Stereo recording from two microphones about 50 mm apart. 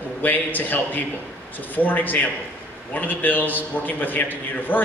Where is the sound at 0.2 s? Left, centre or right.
Left.